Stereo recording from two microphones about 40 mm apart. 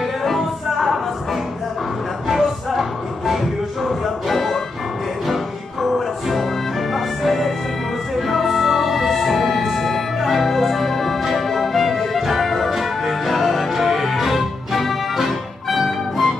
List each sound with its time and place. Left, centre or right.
0.2 s music: centre
2.2 s a sound: centre
3.8 s music: centre